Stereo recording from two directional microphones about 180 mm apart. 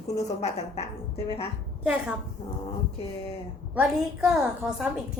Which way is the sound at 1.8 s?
5° right (ahead or behind).